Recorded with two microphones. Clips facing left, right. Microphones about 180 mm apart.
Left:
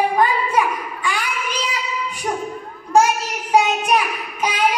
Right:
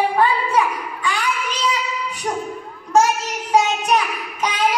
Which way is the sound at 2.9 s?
10° left (ahead or behind).